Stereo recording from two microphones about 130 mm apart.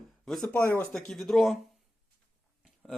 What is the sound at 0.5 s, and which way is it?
Speech, 15° left (ahead or behind).